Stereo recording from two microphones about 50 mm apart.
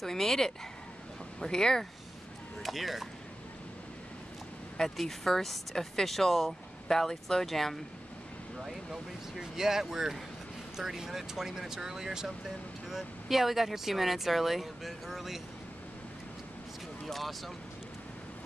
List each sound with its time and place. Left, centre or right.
0.0 s speech: centre
2.6 s speech: centre
4.8 s speech: centre
8.5 s speech: centre
17.1 s speech: centre